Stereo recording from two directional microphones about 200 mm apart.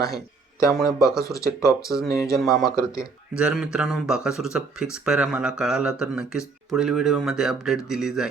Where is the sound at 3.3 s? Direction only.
5° right (ahead or behind).